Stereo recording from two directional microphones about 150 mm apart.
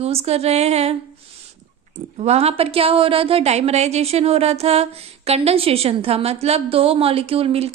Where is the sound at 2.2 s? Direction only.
45° right (ahead or behind).